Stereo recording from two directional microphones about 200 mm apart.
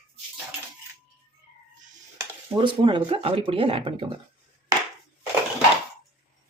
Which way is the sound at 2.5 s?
25° right (ahead or behind).